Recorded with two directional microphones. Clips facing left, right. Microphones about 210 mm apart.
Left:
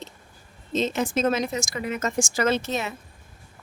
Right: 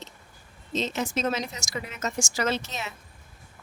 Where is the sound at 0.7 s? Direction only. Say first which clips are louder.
Left 4 dB; 50° left (ahead or behind).